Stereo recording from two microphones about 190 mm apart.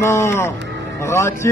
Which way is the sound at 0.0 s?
15° left (ahead or behind).